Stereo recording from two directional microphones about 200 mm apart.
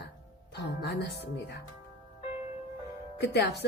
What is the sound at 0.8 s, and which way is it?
Speech, 60° left (ahead or behind).